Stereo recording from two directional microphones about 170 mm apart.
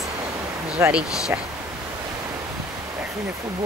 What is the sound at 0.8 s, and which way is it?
Speech, 15° right (ahead or behind).